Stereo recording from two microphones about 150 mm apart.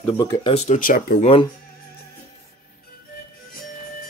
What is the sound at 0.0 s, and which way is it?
Speech, 20° left (ahead or behind).